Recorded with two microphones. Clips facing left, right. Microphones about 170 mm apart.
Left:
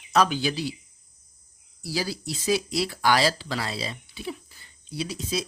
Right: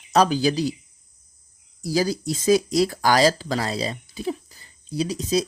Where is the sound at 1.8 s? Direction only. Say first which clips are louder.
Right 7 dB; 45° right (ahead or behind).